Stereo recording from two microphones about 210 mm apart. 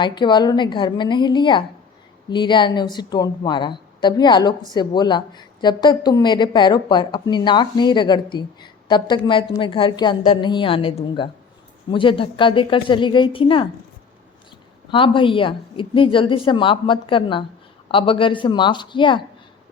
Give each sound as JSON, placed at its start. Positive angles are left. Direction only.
{"t": 0.0, "sound": "a woman's voice", "side_deg": 20}
{"t": 14.8, "sound": "a woman's voice", "side_deg": 25}